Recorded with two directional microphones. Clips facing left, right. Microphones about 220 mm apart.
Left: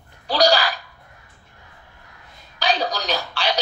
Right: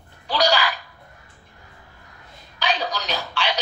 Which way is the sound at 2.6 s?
35° left (ahead or behind).